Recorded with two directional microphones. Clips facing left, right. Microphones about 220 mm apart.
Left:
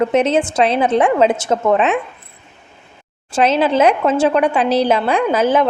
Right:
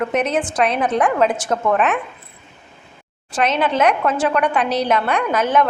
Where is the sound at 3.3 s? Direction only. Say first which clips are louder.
Left 4 dB; 30° left (ahead or behind).